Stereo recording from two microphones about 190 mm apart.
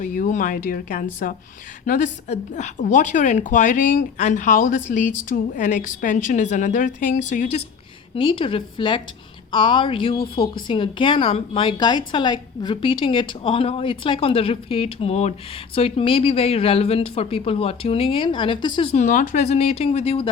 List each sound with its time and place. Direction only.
0.0 s a woman's voice: 45° left (ahead or behind)
8.1 s a woman's voice: 25° left (ahead or behind)